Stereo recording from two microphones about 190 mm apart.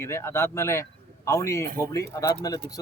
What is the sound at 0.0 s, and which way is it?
A man's voice, 15° left (ahead or behind).